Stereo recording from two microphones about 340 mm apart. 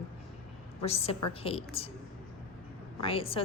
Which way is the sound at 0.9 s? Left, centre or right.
Centre.